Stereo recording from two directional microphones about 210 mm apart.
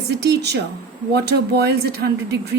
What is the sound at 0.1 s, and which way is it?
A woman's voice, 50° right (ahead or behind).